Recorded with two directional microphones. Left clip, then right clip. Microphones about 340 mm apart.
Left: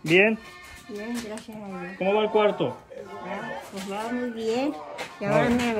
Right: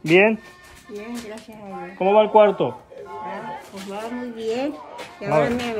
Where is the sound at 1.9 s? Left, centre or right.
Centre.